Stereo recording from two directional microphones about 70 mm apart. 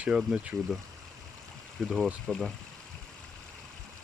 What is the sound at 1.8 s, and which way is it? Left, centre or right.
Speech, centre.